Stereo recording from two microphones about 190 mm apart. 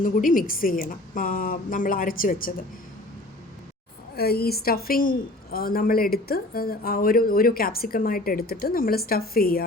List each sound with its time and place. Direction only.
0.0 s a woman's voice: 45° left (ahead or behind)
4.1 s a woman's voice: 55° left (ahead or behind)